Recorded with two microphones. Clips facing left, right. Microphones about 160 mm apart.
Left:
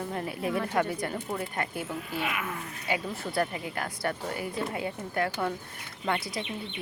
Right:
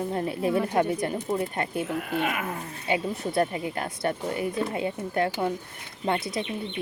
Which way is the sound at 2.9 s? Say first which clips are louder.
Right 5 dB; 25° right (ahead or behind).